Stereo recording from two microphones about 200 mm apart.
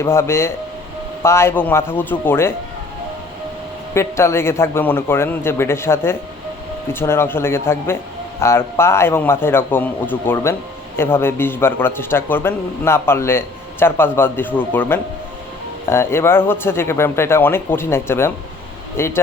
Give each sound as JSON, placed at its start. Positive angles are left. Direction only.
{"t": 0.0, "sound": "speech", "side_deg": 15}
{"t": 3.9, "sound": "speech", "side_deg": 15}